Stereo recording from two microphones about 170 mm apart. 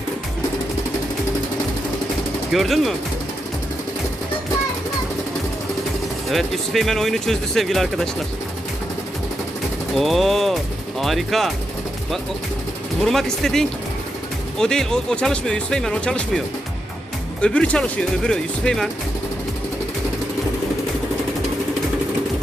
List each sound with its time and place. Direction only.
2.5 s speech: centre (ahead or behind)
6.3 s speech: centre (ahead or behind)
9.9 s speech: centre (ahead or behind)
13.0 s speech: centre (ahead or behind)
17.4 s speech: 5° left (ahead or behind)